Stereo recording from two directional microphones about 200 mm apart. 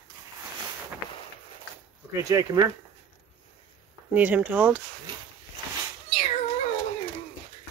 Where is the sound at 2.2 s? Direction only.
20° right (ahead or behind).